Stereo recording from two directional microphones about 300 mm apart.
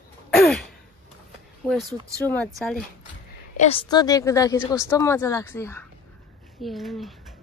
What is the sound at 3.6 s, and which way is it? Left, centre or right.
A woman's voice, centre.